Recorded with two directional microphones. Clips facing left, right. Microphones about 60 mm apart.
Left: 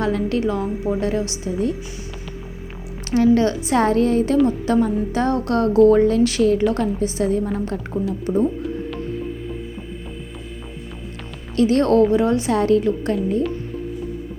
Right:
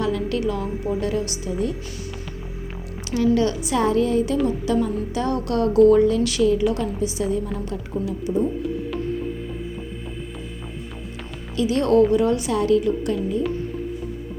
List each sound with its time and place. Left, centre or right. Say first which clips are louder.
0.0 s a woman's voice: left 2 dB; left
3.1 s a woman's voice: left 4 dB; left
11.5 s speech: left 2 dB; left
12.1 s a woman's voice: left 2 dB; left